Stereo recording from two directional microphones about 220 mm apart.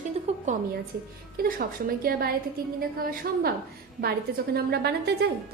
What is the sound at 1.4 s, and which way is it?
A woman's voice, 40° right (ahead or behind).